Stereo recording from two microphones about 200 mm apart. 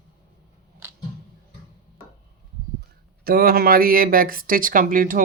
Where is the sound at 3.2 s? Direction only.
50° right (ahead or behind).